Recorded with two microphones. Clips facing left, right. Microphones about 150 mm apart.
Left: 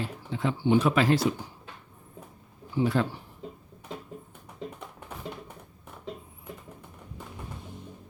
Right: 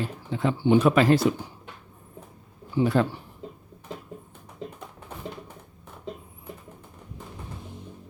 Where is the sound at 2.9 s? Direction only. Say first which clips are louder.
Right 5 dB; 50° right (ahead or behind).